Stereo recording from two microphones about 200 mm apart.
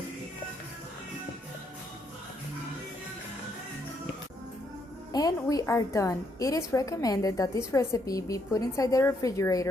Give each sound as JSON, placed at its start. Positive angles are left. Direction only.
{"t": 5.1, "sound": "a woman's voice", "side_deg": 20}